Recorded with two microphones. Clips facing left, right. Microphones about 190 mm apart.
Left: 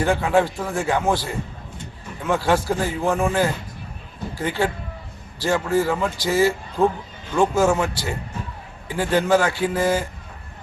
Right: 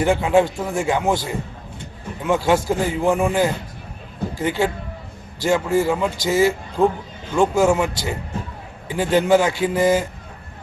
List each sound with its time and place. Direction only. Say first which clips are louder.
0.0 s a man's voice: right 2 dB; 20° right (ahead or behind)